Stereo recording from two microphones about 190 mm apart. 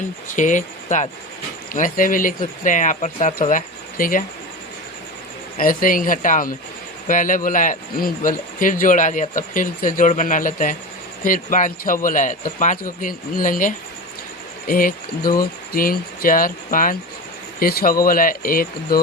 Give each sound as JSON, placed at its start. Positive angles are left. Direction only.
{"t": 0.3, "sound": "a man's voice", "side_deg": 40}
{"t": 5.5, "sound": "a man's voice", "side_deg": 45}